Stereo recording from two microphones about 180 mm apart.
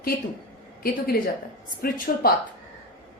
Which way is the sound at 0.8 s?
55° left (ahead or behind).